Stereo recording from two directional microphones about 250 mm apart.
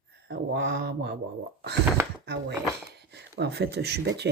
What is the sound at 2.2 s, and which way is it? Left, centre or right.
Mantra, right.